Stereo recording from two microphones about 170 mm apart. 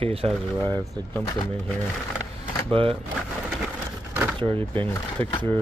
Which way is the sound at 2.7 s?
30° right (ahead or behind).